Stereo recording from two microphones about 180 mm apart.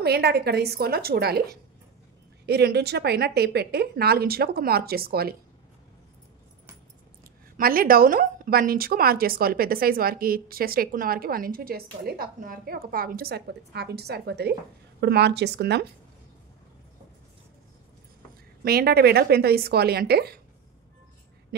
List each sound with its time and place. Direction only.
0.0 s speech: 60° right (ahead or behind)
7.5 s speech: 55° right (ahead or behind)
18.6 s speech: 60° right (ahead or behind)